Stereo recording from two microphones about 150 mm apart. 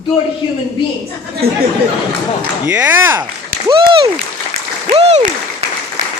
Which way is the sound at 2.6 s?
10° right (ahead or behind).